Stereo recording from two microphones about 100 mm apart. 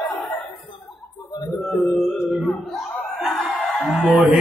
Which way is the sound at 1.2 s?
35° left (ahead or behind).